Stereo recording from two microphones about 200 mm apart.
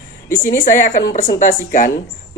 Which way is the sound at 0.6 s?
40° left (ahead or behind).